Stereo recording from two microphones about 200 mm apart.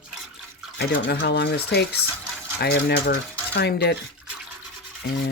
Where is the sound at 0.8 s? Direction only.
50° left (ahead or behind).